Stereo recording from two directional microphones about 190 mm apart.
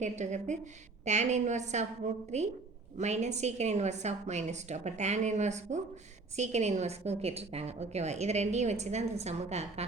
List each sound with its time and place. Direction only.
0.0 s a woman's voice: 40° right (ahead or behind)